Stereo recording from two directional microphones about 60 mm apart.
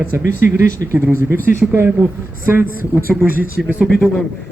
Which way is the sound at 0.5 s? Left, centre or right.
Right.